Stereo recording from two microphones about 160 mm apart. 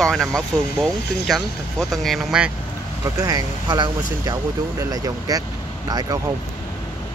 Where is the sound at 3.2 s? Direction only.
25° right (ahead or behind).